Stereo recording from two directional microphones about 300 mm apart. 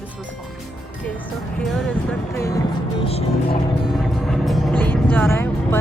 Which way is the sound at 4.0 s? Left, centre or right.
Centre.